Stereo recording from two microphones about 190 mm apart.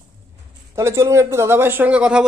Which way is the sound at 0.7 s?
15° right (ahead or behind).